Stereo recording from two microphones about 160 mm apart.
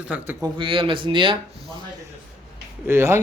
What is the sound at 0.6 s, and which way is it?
Speech, 30° right (ahead or behind).